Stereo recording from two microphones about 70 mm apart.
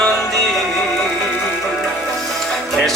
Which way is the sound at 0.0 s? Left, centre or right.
Centre.